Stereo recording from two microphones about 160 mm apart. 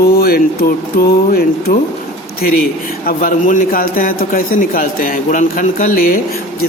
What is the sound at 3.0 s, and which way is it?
A man's voice, 60° left (ahead or behind).